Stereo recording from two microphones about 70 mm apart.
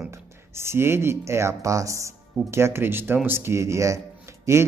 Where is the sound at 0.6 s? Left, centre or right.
Right.